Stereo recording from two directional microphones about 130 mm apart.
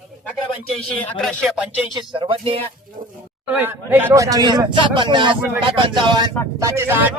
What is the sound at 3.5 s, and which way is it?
Speech, 15° right (ahead or behind).